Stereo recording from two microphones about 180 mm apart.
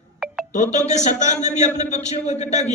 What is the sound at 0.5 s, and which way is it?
A man's voice, 40° left (ahead or behind).